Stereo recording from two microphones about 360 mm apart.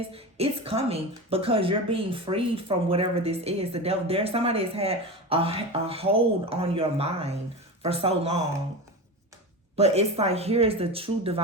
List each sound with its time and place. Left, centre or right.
0.1 s a woman's voice: centre
9.7 s a woman's voice: centre